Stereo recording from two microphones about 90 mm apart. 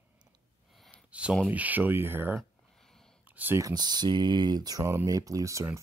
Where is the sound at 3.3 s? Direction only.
20° right (ahead or behind).